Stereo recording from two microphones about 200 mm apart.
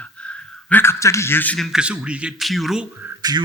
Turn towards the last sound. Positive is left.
turn(degrees=-5)  # may be behind; listen again after turning